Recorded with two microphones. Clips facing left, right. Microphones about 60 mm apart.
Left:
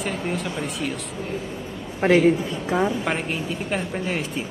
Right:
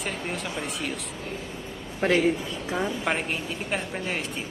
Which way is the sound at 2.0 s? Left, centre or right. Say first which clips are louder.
Left 5 dB; centre.